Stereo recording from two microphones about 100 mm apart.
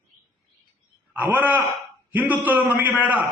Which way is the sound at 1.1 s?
15° right (ahead or behind).